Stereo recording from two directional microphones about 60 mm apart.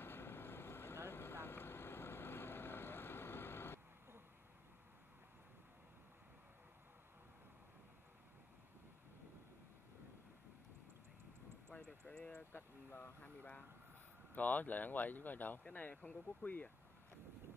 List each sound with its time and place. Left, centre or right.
0.0 s vehicle: left
11.7 s vehicle: left
12.1 s speech: centre
12.4 s speech: left